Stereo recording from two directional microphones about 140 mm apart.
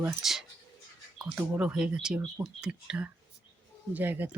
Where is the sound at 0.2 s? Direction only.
Centre (ahead or behind).